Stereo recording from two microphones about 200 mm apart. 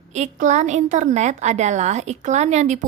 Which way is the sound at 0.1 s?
35° right (ahead or behind).